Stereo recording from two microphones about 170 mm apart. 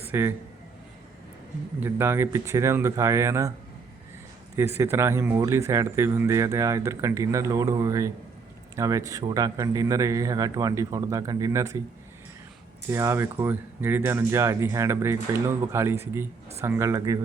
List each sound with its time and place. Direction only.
0.1 s a man's voice: 15° right (ahead or behind)
1.8 s speech: 15° right (ahead or behind)
4.5 s a man's voice: 15° right (ahead or behind)
12.9 s speech: 15° right (ahead or behind)